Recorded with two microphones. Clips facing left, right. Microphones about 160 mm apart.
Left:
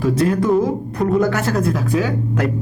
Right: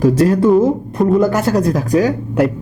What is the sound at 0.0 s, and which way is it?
Speech, 40° right (ahead or behind).